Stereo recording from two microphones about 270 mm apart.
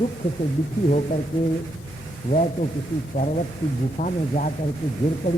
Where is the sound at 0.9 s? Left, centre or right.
Left.